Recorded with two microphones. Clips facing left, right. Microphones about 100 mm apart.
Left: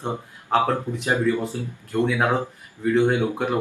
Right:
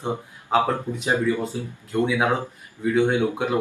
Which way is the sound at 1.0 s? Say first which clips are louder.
Even; 15° right (ahead or behind).